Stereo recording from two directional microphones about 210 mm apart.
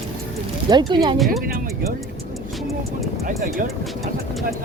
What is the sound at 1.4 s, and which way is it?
Music, 45° right (ahead or behind).